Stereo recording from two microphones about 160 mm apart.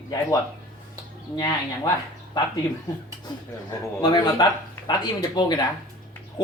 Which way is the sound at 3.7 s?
25° left (ahead or behind).